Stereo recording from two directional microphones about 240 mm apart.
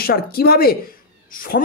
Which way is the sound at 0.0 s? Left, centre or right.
Left.